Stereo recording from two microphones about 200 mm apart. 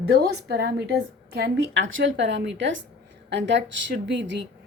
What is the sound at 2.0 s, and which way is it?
A woman's voice, 65° right (ahead or behind).